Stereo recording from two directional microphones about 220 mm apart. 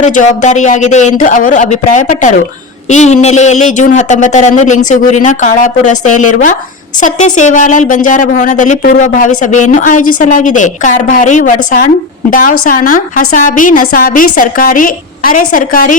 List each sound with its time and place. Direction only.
0.0 s a woman's voice: 35° left (ahead or behind)